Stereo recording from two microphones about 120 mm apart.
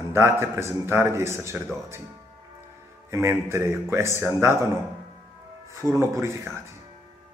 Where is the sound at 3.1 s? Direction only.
20° right (ahead or behind).